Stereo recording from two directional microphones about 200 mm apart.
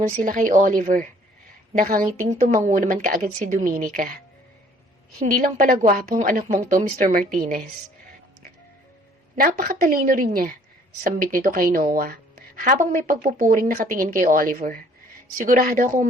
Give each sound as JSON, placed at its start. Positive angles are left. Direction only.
{"t": 0.2, "sound": "a woman's voice", "side_deg": -40}
{"t": 5.2, "sound": "a woman's voice", "side_deg": -40}
{"t": 9.3, "sound": "a woman's voice", "side_deg": -45}